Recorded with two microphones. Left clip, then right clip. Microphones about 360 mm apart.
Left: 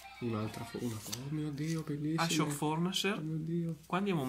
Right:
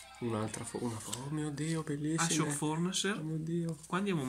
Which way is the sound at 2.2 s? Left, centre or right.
Centre.